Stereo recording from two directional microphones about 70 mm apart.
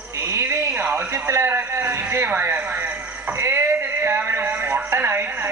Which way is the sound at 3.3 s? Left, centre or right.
Right.